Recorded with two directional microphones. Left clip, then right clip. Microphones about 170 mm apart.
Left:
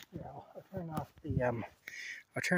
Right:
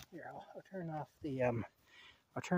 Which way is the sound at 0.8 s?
10° right (ahead or behind).